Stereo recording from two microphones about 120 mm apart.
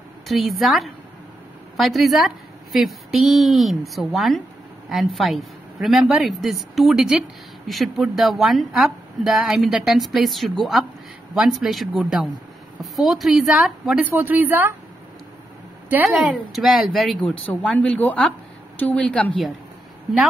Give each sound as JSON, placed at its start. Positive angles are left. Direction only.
{"t": 0.3, "sound": "speech", "side_deg": 0}
{"t": 14.0, "sound": "a woman's voice", "side_deg": -15}
{"t": 15.9, "sound": "a woman's voice", "side_deg": -15}
{"t": 16.2, "sound": "speech", "side_deg": 0}